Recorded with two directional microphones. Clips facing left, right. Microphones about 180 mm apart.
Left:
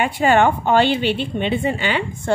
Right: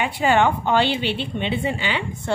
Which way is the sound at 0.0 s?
50° left (ahead or behind).